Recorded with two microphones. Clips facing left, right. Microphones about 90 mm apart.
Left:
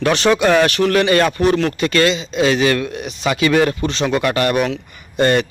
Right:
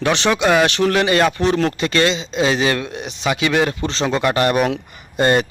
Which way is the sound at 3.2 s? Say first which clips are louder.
Left 3 dB; 15° right (ahead or behind).